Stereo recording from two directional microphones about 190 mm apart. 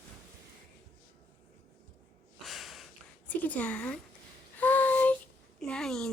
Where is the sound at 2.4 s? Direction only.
Centre (ahead or behind).